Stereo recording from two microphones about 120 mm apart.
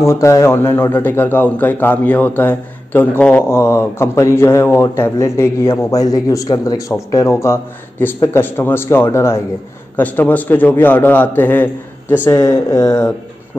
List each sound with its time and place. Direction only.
0.0 s a man's voice: 25° left (ahead or behind)
12.3 s a man's voice: 25° left (ahead or behind)